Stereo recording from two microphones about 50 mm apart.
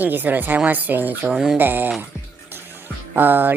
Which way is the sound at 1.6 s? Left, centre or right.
Right.